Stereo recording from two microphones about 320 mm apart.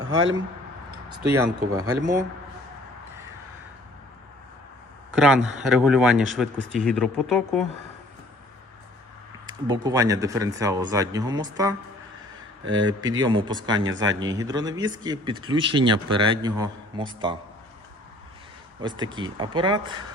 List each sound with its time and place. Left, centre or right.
0.0 s speech: right
0.9 s a sound: centre
1.5 s speech: centre
5.1 s speech: centre
9.5 s speech: centre
12.6 s speech: right
13.0 s speech: centre
18.8 s speech: centre